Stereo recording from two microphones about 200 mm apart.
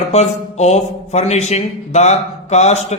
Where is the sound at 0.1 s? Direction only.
35° left (ahead or behind).